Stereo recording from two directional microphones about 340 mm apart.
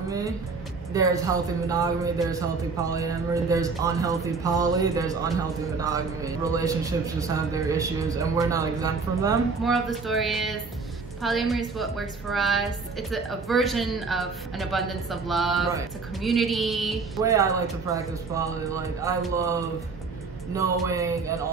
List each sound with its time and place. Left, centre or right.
0.9 s a man's voice: centre